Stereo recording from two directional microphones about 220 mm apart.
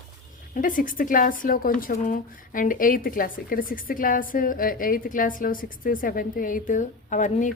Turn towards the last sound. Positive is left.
turn(degrees=35)  # may be behind; listen again after turning